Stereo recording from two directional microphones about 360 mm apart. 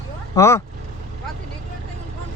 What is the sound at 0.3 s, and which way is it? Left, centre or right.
Speech, centre.